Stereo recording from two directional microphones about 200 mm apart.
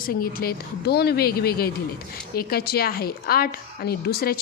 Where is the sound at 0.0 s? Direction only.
45° left (ahead or behind).